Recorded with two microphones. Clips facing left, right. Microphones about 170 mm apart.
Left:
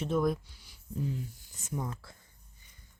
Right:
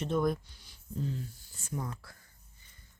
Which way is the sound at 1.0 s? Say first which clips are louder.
Left 1 dB; 15° left (ahead or behind).